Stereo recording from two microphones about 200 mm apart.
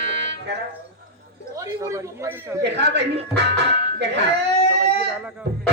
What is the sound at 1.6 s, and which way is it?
Speech, 15° right (ahead or behind).